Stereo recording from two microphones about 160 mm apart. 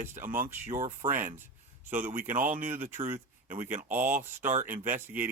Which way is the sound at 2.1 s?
55° right (ahead or behind).